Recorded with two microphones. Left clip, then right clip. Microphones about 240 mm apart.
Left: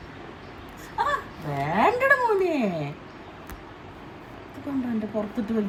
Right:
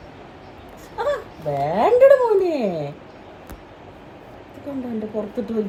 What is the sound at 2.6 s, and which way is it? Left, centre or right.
Speech, left.